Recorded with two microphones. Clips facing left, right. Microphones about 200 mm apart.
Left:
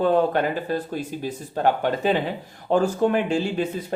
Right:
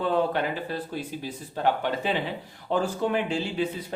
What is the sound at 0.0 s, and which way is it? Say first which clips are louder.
Speech: left 5 dB; 45° left (ahead or behind).